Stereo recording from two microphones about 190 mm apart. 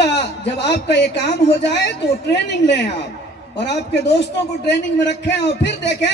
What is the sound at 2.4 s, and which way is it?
Speech, 65° left (ahead or behind).